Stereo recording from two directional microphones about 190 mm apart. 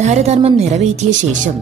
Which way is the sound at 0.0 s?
35° right (ahead or behind).